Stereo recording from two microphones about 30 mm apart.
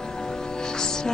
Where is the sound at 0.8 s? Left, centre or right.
Left.